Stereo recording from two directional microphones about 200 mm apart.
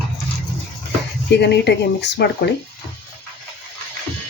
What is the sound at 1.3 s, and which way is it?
Speech, 60° left (ahead or behind).